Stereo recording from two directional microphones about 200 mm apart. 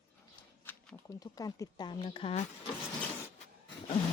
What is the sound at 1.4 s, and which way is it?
Speech, 20° left (ahead or behind).